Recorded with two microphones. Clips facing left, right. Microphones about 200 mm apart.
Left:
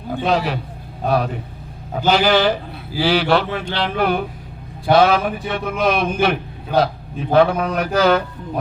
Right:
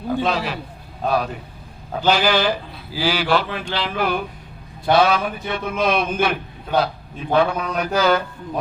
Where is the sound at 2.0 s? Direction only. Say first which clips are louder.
Left 2 dB; 50° left (ahead or behind).